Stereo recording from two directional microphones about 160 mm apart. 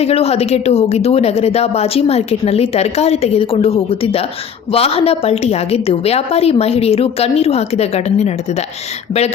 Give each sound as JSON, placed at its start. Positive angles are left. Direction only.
{"t": 0.0, "sound": "a woman's voice", "side_deg": 40}